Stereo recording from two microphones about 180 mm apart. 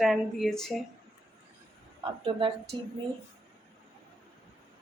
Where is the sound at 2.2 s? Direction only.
30° right (ahead or behind).